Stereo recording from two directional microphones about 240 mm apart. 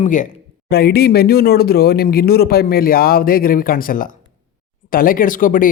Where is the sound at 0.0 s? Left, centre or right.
Left.